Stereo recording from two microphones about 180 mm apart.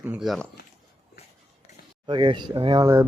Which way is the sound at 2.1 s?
25° right (ahead or behind).